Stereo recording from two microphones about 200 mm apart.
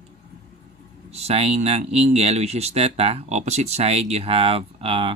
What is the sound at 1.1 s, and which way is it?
Speech, 30° right (ahead or behind).